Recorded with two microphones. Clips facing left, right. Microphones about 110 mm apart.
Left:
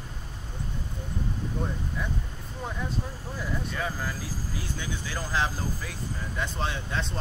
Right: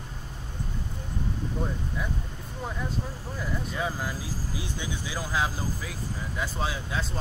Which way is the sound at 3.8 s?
15° right (ahead or behind).